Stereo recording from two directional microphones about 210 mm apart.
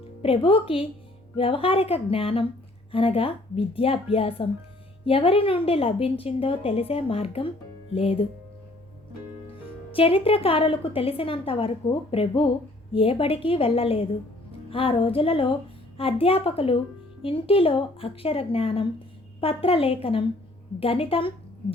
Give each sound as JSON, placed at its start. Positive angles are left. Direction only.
{"t": 0.2, "sound": "a woman's voice", "side_deg": 25}
{"t": 9.9, "sound": "a woman's voice", "side_deg": 25}